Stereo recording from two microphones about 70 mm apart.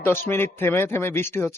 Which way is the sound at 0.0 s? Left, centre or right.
Left.